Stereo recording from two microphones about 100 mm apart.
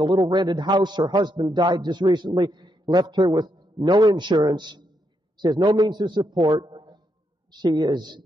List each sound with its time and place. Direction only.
0.0 s a man's voice: 50° right (ahead or behind)
6.5 s a sound: 45° right (ahead or behind)
7.6 s a man's voice: 50° right (ahead or behind)